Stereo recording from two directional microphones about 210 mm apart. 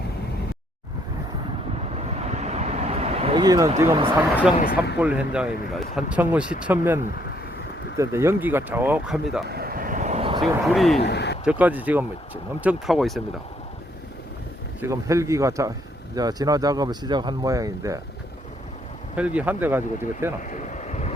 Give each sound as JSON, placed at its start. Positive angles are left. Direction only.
{"t": 2.2, "sound": "vehicle", "side_deg": -30}
{"t": 3.8, "sound": "speech", "side_deg": -10}
{"t": 9.5, "sound": "vehicle", "side_deg": -45}
{"t": 10.4, "sound": "speech", "side_deg": 0}
{"t": 11.0, "sound": "speech", "side_deg": 55}
{"t": 11.4, "sound": "speech", "side_deg": -5}
{"t": 14.8, "sound": "speech", "side_deg": -15}
{"t": 19.1, "sound": "speech", "side_deg": -5}
{"t": 20.5, "sound": "vehicle", "side_deg": 35}